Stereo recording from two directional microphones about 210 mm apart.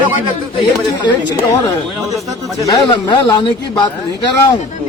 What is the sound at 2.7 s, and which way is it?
A man's voice, 20° left (ahead or behind).